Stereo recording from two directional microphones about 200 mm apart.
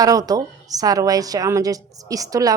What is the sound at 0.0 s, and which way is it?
A woman's voice, 20° right (ahead or behind).